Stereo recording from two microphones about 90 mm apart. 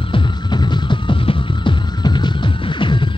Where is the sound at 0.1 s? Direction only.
60° left (ahead or behind).